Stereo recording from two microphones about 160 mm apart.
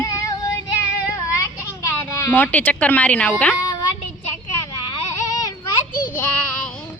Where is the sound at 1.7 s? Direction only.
20° left (ahead or behind).